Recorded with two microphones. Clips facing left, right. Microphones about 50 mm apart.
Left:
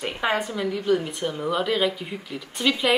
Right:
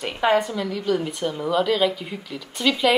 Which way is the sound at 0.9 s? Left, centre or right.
Centre.